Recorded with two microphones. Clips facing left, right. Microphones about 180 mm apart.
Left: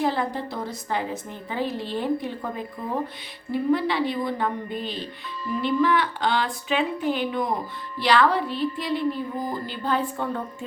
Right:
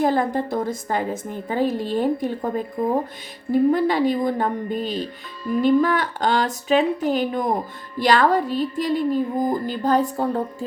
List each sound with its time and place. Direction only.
0.0 s speech: 50° right (ahead or behind)